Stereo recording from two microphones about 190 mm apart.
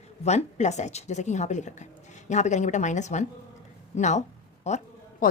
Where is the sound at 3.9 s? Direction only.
40° left (ahead or behind).